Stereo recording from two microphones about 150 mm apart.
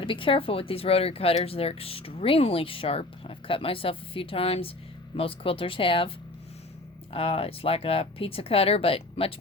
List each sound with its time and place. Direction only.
0.0 s speech: 35° left (ahead or behind)